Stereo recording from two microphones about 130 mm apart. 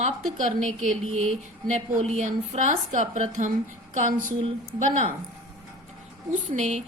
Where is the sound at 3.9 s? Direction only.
80° right.